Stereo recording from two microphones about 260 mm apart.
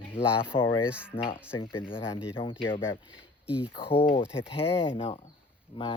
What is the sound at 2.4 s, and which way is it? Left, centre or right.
Speech, left.